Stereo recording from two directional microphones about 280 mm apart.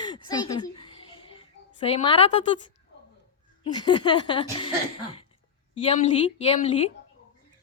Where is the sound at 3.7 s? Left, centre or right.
Centre.